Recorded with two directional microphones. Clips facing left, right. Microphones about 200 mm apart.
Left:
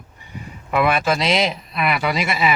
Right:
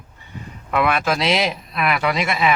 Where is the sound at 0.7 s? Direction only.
Centre (ahead or behind).